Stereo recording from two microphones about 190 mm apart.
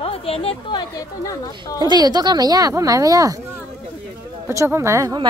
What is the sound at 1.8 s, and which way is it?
Speech, 20° right (ahead or behind).